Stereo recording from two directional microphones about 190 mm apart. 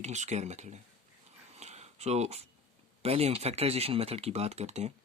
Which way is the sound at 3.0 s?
30° right (ahead or behind).